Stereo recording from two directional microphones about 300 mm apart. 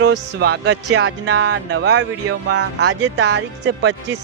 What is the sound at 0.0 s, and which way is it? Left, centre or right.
Speech, right.